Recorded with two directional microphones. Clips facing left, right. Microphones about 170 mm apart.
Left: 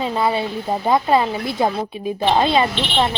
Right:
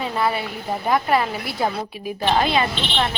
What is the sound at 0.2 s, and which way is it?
Speech, 20° left (ahead or behind).